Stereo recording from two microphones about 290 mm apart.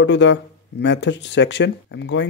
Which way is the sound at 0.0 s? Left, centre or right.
Left.